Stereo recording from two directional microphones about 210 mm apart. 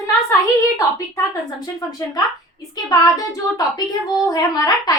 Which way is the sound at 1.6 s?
20° left (ahead or behind).